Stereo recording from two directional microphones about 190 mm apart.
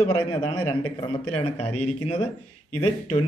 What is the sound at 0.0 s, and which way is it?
Speech, 30° left (ahead or behind).